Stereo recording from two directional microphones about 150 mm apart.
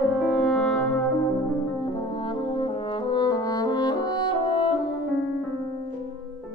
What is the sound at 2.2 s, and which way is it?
French horn, 35° left (ahead or behind).